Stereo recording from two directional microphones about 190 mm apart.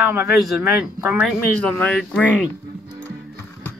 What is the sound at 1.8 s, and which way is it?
Speech, 5° left (ahead or behind).